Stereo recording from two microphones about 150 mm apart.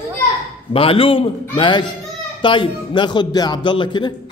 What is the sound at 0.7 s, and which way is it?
Speech, 40° left (ahead or behind).